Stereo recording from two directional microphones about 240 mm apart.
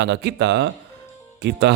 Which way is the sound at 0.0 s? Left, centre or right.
Right.